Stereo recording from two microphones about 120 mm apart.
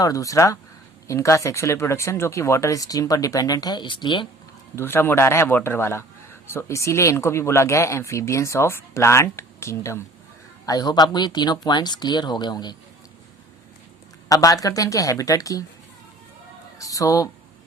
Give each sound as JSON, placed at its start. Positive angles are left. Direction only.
{"t": 0.0, "sound": "speech", "side_deg": 30}
{"t": 4.7, "sound": "speech", "side_deg": 20}
{"t": 14.3, "sound": "speech", "side_deg": 30}
{"t": 16.7, "sound": "music", "side_deg": 30}